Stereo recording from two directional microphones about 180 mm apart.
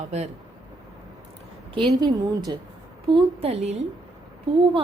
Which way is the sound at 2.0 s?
20° right (ahead or behind).